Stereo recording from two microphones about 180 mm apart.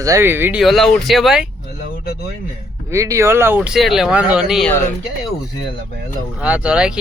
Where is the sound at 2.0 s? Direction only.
60° left (ahead or behind).